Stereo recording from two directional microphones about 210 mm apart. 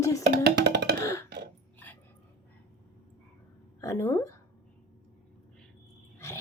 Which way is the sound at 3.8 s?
15° left (ahead or behind).